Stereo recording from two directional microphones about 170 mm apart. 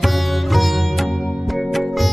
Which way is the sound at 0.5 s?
Centre (ahead or behind).